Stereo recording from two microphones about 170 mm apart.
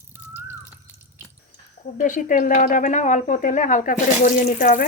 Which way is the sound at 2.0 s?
50° left (ahead or behind).